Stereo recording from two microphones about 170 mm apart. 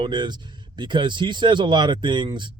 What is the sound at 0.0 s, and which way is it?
Speech, 25° right (ahead or behind).